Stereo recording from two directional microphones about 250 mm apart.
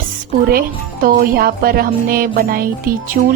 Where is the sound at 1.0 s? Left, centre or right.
Right.